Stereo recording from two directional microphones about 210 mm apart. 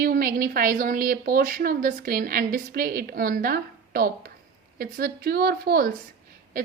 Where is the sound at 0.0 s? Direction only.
45° right (ahead or behind).